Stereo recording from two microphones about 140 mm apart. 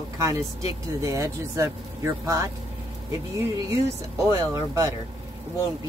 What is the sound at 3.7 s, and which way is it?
Speech, 20° right (ahead or behind).